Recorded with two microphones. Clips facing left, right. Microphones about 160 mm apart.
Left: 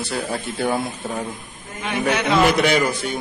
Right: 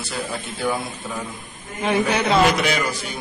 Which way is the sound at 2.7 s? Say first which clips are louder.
Left 4 dB; 55° left (ahead or behind).